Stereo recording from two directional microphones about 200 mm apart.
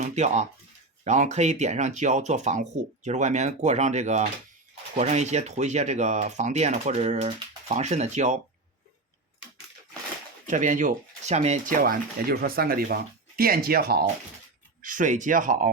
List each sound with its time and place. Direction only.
0.0 s speech: 35° right (ahead or behind)
10.4 s speech: 40° right (ahead or behind)
14.8 s speech: 40° right (ahead or behind)